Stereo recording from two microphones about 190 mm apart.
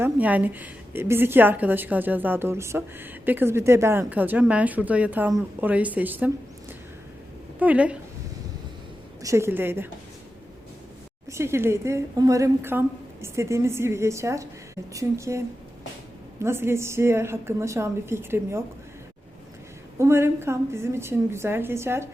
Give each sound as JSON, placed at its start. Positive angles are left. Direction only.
{"t": 0.0, "sound": "a woman's voice", "side_deg": -10}
{"t": 9.2, "sound": "a woman's voice", "side_deg": -15}
{"t": 11.3, "sound": "a woman's voice", "side_deg": -15}
{"t": 20.0, "sound": "a woman's voice", "side_deg": -15}